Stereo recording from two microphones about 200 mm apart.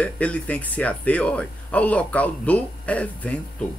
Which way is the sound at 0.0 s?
5° left (ahead or behind).